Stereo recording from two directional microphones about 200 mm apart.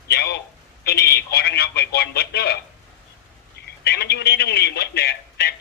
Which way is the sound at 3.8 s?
55° left (ahead or behind).